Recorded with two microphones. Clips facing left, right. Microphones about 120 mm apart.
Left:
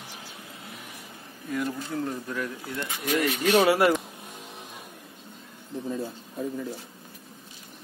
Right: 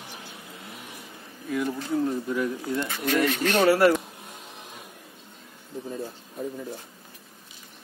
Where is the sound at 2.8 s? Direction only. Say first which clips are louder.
Right 1 dB; 10° left (ahead or behind).